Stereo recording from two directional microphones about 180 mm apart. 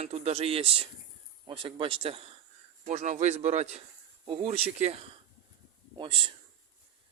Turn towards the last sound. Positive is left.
turn(degrees=-25)  # may be behind; listen again after turning